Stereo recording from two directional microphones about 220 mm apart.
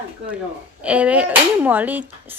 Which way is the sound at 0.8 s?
5° right (ahead or behind).